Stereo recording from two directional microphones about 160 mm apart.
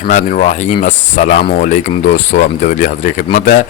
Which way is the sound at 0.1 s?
55° left (ahead or behind).